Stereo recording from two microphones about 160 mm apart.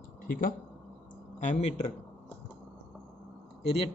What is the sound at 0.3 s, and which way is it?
Speech, 60° left (ahead or behind).